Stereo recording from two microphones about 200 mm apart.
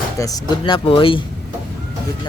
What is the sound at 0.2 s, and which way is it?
Speech, 20° left (ahead or behind).